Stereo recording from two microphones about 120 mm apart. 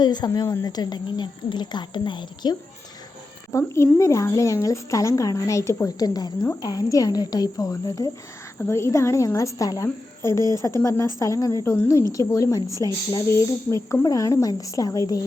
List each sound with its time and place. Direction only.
0.0 s a woman's voice: 35° left (ahead or behind)
3.5 s a woman's voice: 25° left (ahead or behind)